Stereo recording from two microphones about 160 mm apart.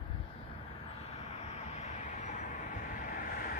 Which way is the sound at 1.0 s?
40° left (ahead or behind).